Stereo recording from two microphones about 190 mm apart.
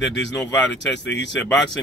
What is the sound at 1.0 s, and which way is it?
Speech, 65° left (ahead or behind).